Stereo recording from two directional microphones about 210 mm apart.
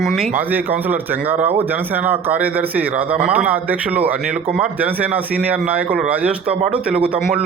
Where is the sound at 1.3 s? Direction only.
35° right (ahead or behind).